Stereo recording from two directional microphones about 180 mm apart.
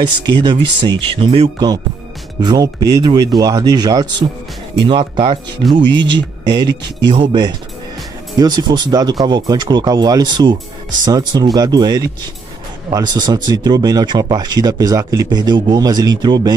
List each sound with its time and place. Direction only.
0.2 s speech: 25° right (ahead or behind)